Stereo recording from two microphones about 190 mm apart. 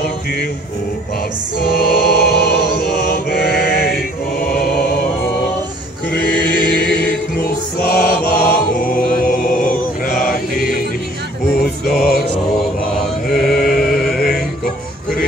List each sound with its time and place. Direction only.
1.7 s choir: 55° left (ahead or behind)
6.5 s choir: 65° left (ahead or behind)
7.4 s chant: 50° left (ahead or behind)
11.8 s music: centre (ahead or behind)
13.4 s chant: centre (ahead or behind)
14.0 s male singing: centre (ahead or behind)